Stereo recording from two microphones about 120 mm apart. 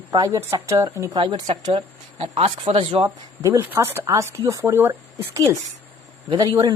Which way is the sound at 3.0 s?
25° right (ahead or behind).